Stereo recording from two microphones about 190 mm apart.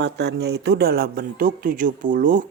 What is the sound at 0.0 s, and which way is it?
Speech, 60° right (ahead or behind).